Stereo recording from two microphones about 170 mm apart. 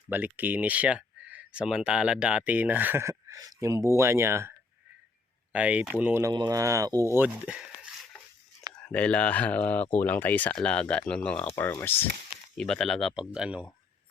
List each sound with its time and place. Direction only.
0.1 s speech: 10° right (ahead or behind)
8.8 s speech: 10° left (ahead or behind)